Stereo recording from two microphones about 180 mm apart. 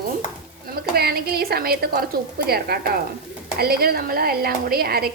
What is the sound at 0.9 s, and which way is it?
A woman's voice, 60° right (ahead or behind).